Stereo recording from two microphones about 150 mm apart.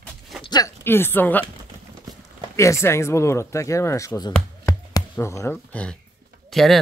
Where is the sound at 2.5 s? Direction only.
20° left (ahead or behind).